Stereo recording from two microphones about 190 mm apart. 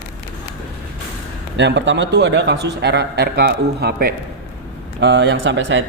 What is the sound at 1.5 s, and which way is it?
A man's voice, 65° right (ahead or behind).